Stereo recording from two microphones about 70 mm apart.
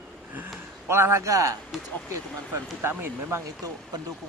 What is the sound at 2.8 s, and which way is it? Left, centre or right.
Speech, right.